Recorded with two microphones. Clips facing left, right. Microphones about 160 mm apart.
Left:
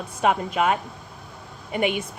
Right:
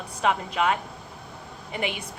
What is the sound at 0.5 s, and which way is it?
Speech, 25° left (ahead or behind).